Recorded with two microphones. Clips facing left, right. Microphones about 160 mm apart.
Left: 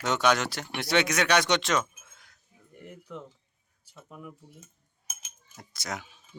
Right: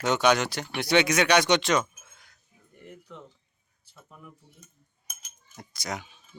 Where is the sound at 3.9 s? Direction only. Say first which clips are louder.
Left 5 dB; 5° left (ahead or behind).